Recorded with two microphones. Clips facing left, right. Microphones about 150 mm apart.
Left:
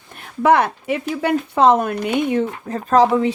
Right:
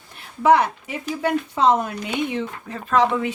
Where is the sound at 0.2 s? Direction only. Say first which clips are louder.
Left 1 dB; 60° left (ahead or behind).